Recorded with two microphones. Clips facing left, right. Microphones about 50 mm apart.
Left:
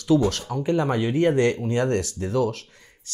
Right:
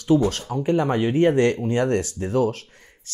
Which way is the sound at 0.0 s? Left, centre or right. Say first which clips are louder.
Right 1 dB; right.